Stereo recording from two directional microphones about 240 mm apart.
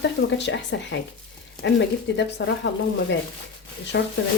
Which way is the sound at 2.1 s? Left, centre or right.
Left.